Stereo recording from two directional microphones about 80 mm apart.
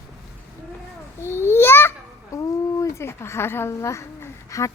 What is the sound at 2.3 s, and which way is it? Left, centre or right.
Speech, left.